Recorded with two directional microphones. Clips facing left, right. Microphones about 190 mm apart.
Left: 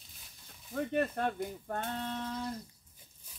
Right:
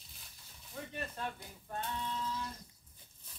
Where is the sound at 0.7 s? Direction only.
60° left (ahead or behind).